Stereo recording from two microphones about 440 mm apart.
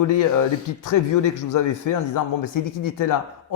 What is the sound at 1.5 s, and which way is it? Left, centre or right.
A man's voice, left.